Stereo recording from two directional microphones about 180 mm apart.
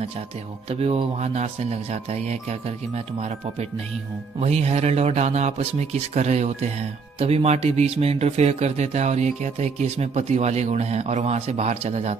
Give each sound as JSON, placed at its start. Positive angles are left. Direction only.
{"t": 0.7, "sound": "speech", "side_deg": -35}
{"t": 4.4, "sound": "speech", "side_deg": -35}